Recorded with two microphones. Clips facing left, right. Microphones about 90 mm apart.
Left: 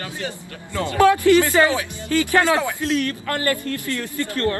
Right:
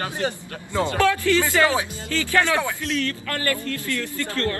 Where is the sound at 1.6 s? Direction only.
30° left (ahead or behind).